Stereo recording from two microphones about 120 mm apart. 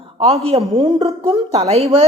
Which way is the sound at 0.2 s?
60° right (ahead or behind).